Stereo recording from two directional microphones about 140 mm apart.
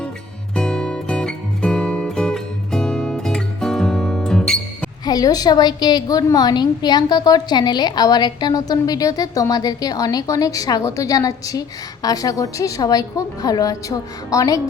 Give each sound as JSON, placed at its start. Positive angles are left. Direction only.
{"t": 0.5, "sound": "music", "side_deg": 5}
{"t": 5.0, "sound": "a woman's voice", "side_deg": 25}